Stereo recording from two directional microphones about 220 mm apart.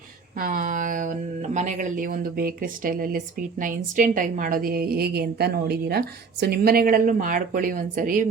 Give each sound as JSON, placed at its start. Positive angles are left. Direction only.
{"t": 0.3, "sound": "a woman's voice", "side_deg": -40}